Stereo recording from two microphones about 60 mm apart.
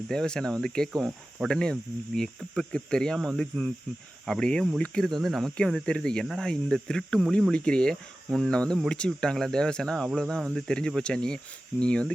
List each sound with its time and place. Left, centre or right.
0.1 s speech: centre
0.9 s speech: centre
1.5 s speech: centre
5.5 s speech: centre